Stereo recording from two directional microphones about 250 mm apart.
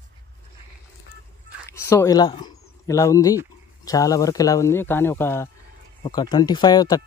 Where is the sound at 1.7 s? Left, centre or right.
Centre.